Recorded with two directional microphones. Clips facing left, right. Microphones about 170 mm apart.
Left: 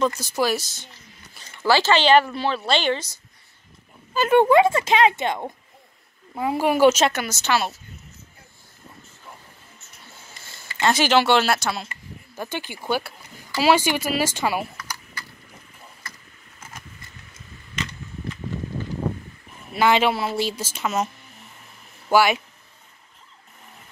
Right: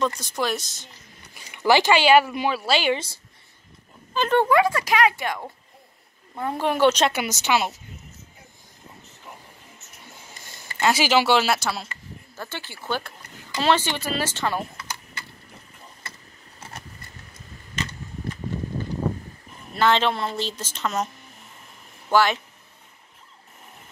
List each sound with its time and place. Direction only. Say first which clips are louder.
0.0 s speech: left 3 dB; 5° left (ahead or behind)
1.3 s speech: right 1 dB; 15° right (ahead or behind)
4.1 s speech: left 3 dB; 5° left (ahead or behind)
4.4 s speech: left 4 dB; 25° left (ahead or behind)
6.3 s a woman's voice: left 3 dB; 10° left (ahead or behind)
7.1 s a woman's voice: even; 15° right (ahead or behind)
10.0 s printer: right 1 dB; 15° right (ahead or behind)
10.8 s speech: left 1 dB; 5° right (ahead or behind)
12.4 s a woman's voice: left 5 dB; 15° left (ahead or behind)
14.8 s a sound: even; 25° right (ahead or behind)
16.0 s vehicle: even; 30° right (ahead or behind)
19.7 s a woman's voice: left 2 dB; 10° left (ahead or behind)
22.1 s a woman's voice: left 2 dB; 10° left (ahead or behind)